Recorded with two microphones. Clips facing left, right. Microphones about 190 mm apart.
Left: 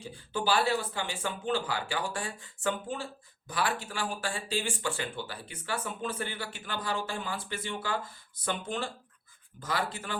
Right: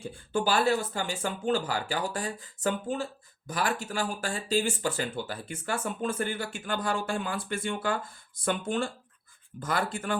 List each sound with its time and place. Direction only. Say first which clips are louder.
0.0 s speech: right 4 dB; 50° right (ahead or behind)